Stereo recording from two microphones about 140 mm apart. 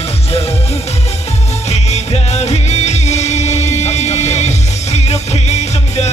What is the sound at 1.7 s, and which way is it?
Music, 50° left (ahead or behind).